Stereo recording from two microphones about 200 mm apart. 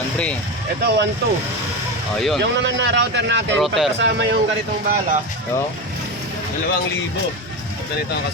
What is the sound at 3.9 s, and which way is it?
Speech, 60° right (ahead or behind).